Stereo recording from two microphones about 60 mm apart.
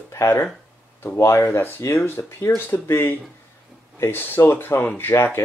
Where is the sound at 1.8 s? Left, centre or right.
Left.